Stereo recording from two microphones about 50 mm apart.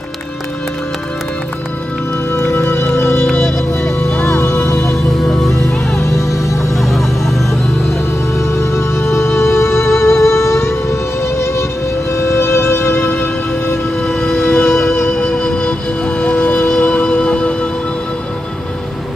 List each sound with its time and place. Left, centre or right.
2.3 s music: left
3.3 s music: left
5.9 s music: left
6.8 s music: centre
8.4 s music: left
14.0 s music: centre
14.4 s music: left
15.1 s music: left
16.2 s music: left